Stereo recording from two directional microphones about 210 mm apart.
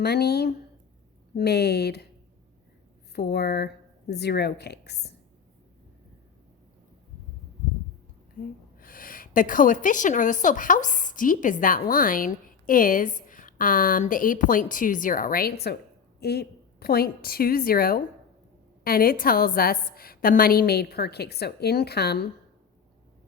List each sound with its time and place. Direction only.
0.0 s a woman's voice: 50° left (ahead or behind)
3.2 s a woman's voice: 50° left (ahead or behind)
8.4 s a woman's voice: 40° left (ahead or behind)